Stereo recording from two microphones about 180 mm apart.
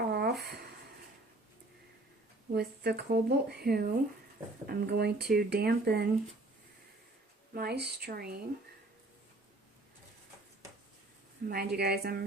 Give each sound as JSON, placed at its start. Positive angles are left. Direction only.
{"t": 0.0, "sound": "a sound", "side_deg": -65}
{"t": 2.5, "sound": "speech", "side_deg": -65}
{"t": 7.5, "sound": "speech", "side_deg": -60}
{"t": 11.4, "sound": "speech", "side_deg": -60}